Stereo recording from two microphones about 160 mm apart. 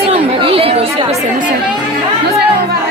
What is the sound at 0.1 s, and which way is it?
Chatter, 35° right (ahead or behind).